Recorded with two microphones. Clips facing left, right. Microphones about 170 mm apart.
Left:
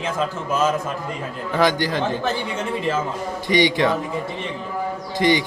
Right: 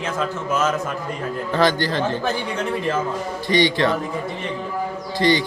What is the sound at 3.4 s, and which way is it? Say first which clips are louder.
Speech: even; 15° left (ahead or behind).